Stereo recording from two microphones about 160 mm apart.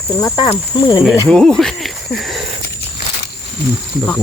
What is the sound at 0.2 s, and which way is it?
Speech, 25° left (ahead or behind).